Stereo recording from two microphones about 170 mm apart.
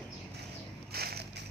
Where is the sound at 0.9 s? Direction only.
65° right (ahead or behind).